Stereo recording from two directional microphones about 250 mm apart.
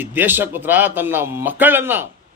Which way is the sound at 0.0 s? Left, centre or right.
Centre.